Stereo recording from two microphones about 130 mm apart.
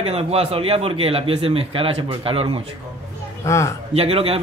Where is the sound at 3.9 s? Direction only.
50° right (ahead or behind).